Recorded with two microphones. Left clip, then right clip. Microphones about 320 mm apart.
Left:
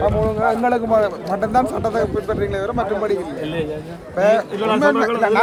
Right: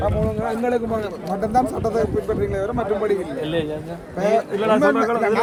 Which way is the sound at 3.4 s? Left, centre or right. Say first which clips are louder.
Even; centre.